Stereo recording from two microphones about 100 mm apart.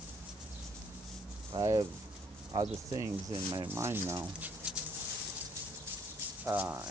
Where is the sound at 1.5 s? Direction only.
40° right (ahead or behind).